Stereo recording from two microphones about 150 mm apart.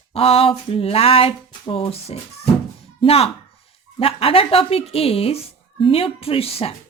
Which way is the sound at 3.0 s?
40° left (ahead or behind).